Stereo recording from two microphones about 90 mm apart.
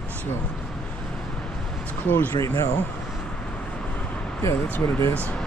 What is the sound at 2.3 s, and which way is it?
Speech, 40° left (ahead or behind).